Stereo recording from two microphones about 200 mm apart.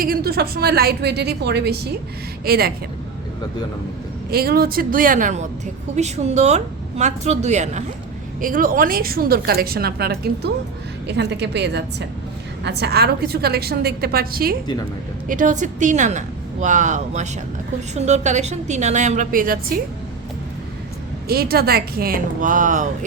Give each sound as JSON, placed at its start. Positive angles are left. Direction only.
{"t": 0.0, "sound": "a woman's voice", "side_deg": -50}
{"t": 4.3, "sound": "a woman's voice", "side_deg": -50}
{"t": 21.2, "sound": "a woman's voice", "side_deg": -50}